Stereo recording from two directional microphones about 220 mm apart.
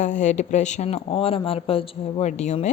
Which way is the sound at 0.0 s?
35° left (ahead or behind).